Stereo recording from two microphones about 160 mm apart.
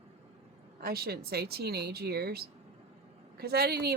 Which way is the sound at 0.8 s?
75° right (ahead or behind).